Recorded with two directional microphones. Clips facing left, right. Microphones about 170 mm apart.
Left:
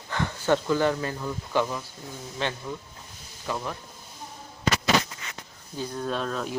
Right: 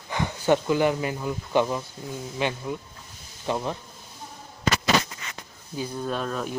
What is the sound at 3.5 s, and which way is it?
Speech, 25° right (ahead or behind).